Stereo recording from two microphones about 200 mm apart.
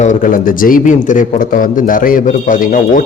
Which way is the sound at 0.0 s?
40° left (ahead or behind).